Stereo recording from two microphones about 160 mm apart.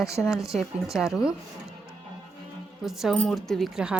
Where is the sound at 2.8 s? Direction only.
Centre (ahead or behind).